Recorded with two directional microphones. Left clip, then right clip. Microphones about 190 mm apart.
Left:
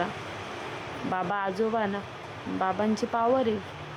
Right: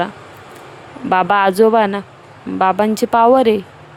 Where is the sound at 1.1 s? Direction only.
50° right (ahead or behind).